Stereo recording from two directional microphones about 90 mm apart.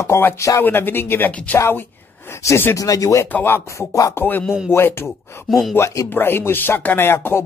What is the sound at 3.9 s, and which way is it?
Speech, 35° left (ahead or behind).